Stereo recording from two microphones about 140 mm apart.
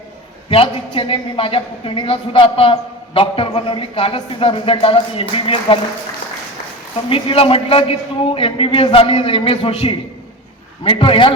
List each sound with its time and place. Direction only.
0.5 s speech: 40° left (ahead or behind)
7.1 s speech: 40° left (ahead or behind)